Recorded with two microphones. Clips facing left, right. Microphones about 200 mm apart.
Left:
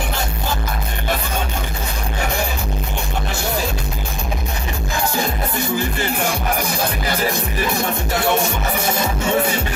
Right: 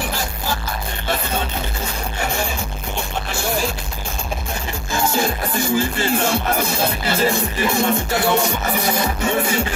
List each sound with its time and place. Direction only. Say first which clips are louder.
5.1 s music: right 1 dB; 20° left (ahead or behind)
7.1 s music: right 2 dB; 15° left (ahead or behind)